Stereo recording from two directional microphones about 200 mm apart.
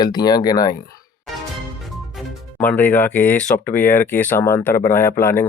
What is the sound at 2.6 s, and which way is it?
Speech, 10° left (ahead or behind).